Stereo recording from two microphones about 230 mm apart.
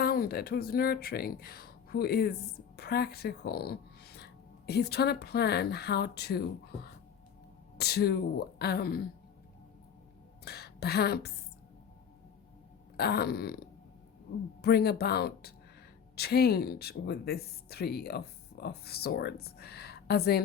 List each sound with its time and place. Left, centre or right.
0.0 s speech: left
7.8 s speech: left
10.4 s a woman's voice: left
13.0 s speech: left
14.6 s speech: left